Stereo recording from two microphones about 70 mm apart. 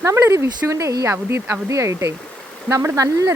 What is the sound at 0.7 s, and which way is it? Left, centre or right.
Speech, right.